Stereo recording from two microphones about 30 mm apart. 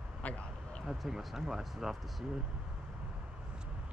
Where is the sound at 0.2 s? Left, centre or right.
Left.